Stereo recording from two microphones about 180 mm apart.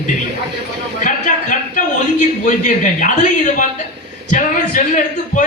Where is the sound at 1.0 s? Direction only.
45° left (ahead or behind).